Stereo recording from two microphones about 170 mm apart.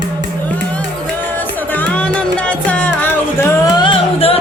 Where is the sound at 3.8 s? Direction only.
30° left (ahead or behind).